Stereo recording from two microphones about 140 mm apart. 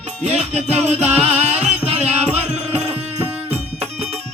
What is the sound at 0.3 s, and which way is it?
Music, 50° right (ahead or behind).